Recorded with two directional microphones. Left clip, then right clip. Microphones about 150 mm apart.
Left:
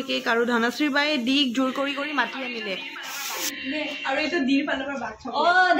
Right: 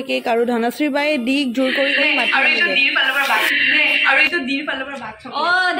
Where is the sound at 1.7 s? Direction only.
75° right (ahead or behind).